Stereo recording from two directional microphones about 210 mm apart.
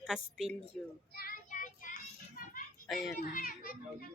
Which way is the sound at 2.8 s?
Centre (ahead or behind).